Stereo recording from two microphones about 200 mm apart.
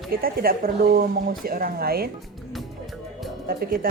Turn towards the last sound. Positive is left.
turn(degrees=-45)  # may be behind; listen again after turning